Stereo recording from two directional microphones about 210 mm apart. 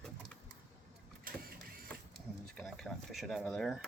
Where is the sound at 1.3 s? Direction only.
45° right (ahead or behind).